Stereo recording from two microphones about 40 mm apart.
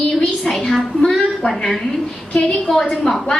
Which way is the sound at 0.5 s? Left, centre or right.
Centre.